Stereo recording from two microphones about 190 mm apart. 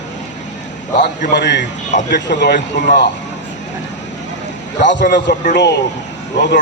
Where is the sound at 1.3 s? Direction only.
65° left (ahead or behind).